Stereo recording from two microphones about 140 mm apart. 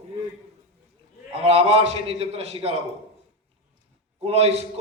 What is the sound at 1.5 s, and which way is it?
Speech, 45° right (ahead or behind).